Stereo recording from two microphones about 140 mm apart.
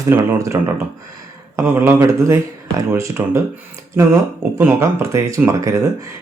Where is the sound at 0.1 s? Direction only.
20° right (ahead or behind).